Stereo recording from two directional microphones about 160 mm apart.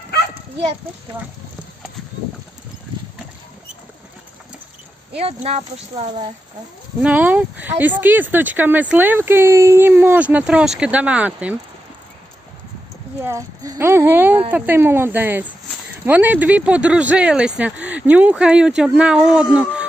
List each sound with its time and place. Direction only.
5.1 s speech: 40° right (ahead or behind)
7.0 s speech: 10° right (ahead or behind)
13.2 s speech: 20° right (ahead or behind)